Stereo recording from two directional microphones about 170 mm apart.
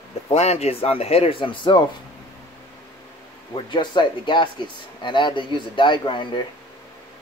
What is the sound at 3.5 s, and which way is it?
Speech, 25° left (ahead or behind).